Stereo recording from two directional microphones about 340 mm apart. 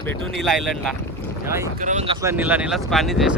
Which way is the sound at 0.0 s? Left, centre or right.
Centre.